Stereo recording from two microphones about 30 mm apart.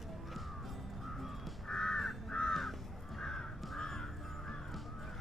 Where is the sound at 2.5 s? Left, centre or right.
Centre.